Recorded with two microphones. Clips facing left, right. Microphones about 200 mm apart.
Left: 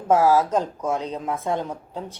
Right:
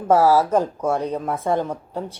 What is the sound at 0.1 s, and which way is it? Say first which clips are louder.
A woman's voice: right 2 dB; 10° right (ahead or behind).